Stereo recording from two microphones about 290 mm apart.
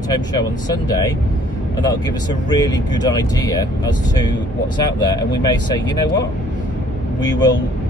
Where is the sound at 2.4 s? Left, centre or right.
Centre.